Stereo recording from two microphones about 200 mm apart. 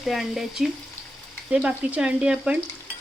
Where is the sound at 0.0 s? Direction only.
Centre (ahead or behind).